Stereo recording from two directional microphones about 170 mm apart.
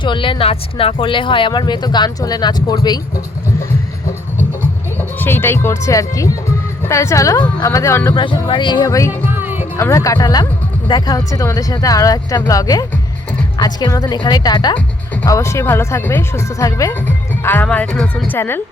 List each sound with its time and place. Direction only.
0.0 s speech: 30° left (ahead or behind)
4.9 s speech: 15° left (ahead or behind)
8.1 s speech: 30° left (ahead or behind)
9.3 s music: 10° right (ahead or behind)
9.7 s speech: 20° left (ahead or behind)